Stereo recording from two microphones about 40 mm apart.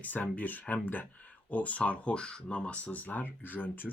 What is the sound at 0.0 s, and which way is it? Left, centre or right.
Speech, left.